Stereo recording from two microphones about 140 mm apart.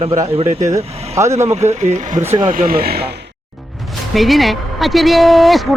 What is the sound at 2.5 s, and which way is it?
Speech, 85° right.